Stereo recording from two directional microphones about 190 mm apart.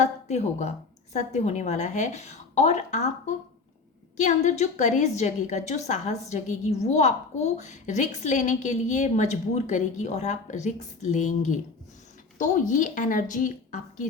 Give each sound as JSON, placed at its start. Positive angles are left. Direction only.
{"t": 0.0, "sound": "a woman's voice", "side_deg": 35}